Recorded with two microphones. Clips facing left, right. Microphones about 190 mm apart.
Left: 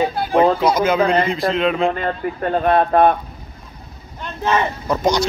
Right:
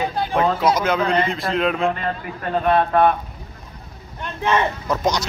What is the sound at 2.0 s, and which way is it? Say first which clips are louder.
Speech: left 5 dB; 35° left (ahead or behind).